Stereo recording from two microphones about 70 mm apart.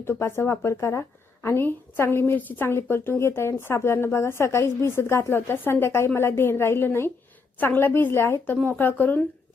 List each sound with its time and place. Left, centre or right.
0.0 s a woman's voice: left
1.4 s a woman's voice: left